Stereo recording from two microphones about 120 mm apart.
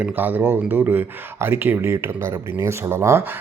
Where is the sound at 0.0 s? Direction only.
15° right (ahead or behind).